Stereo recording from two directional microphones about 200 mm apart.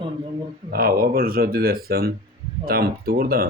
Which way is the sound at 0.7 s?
45° right (ahead or behind).